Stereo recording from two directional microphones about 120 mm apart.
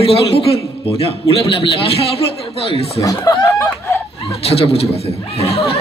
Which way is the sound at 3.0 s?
30° left (ahead or behind).